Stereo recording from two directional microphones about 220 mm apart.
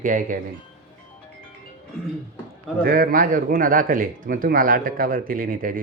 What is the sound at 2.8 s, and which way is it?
A man's voice, 40° right (ahead or behind).